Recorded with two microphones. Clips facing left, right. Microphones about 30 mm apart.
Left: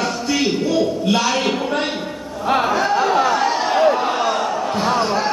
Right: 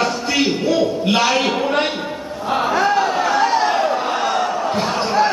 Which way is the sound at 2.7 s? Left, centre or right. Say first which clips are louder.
Right 1 dB; centre.